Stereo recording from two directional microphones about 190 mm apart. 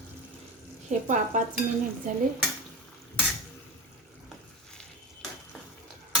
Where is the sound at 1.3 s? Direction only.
40° right (ahead or behind).